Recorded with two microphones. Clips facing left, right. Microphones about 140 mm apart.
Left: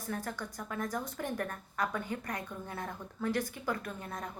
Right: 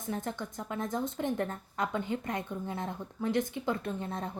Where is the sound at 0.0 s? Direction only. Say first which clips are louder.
Right 3 dB; 20° right (ahead or behind).